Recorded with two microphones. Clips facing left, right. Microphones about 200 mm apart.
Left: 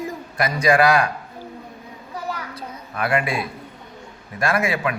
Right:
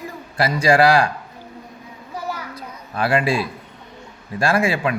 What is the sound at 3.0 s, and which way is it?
A man's voice, 30° right (ahead or behind).